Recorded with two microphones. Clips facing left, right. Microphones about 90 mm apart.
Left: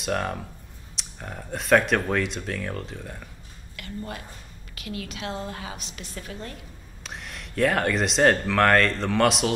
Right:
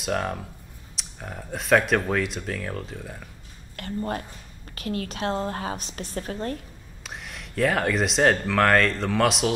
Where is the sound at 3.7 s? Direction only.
40° right (ahead or behind).